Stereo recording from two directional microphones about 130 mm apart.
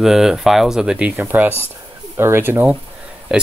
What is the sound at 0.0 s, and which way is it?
Speech, 5° right (ahead or behind).